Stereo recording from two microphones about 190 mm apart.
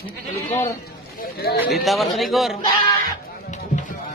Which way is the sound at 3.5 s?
40° left (ahead or behind).